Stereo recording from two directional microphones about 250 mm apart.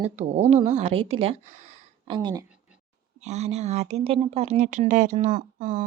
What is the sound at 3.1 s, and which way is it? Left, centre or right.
Speech, right.